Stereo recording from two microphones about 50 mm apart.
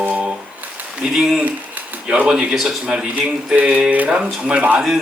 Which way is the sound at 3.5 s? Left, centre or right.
Right.